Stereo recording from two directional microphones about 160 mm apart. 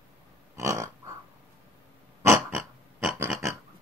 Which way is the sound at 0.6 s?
20° right (ahead or behind).